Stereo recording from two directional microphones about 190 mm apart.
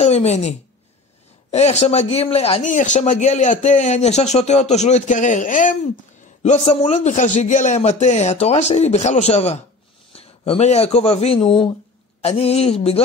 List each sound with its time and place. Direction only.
0.0 s a woman's voice: 35° left (ahead or behind)